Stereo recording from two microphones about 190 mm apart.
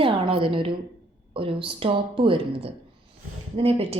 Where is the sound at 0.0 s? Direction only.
25° right (ahead or behind).